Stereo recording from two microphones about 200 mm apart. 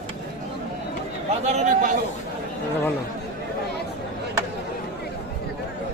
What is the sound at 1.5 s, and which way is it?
Speech, 40° right (ahead or behind).